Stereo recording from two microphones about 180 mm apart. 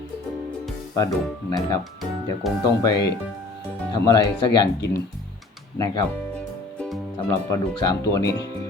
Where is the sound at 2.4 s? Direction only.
Centre (ahead or behind).